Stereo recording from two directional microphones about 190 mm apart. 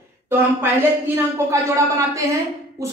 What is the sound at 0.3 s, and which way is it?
A woman's voice, 10° right (ahead or behind).